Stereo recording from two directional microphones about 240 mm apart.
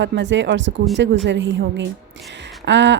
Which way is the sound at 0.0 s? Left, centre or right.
Right.